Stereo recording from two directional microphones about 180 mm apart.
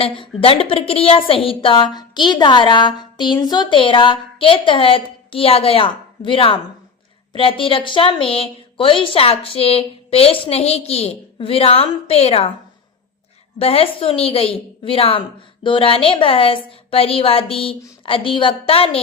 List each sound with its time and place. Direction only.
0.0 s a woman's voice: 30° left (ahead or behind)
13.6 s a woman's voice: 30° left (ahead or behind)